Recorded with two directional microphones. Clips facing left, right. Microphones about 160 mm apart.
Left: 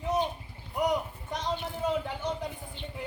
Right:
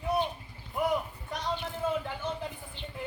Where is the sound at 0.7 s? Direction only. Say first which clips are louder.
Left 1 dB; 20° left (ahead or behind).